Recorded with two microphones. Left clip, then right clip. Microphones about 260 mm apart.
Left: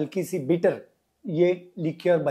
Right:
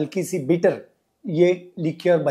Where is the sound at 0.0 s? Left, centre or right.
Right.